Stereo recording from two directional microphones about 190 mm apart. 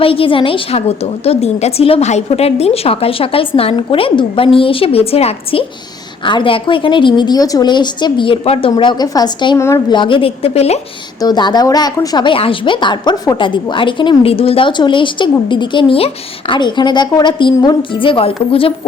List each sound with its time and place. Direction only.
0.0 s speech: 30° left (ahead or behind)
11.2 s speech: 20° left (ahead or behind)